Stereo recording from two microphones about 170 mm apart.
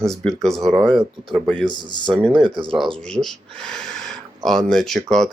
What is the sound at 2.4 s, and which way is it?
Speech, 30° right (ahead or behind).